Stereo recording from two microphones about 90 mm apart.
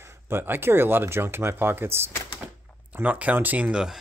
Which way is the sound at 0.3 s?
25° right (ahead or behind).